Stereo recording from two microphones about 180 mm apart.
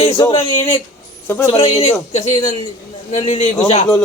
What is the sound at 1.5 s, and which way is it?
A man's voice, 35° left (ahead or behind).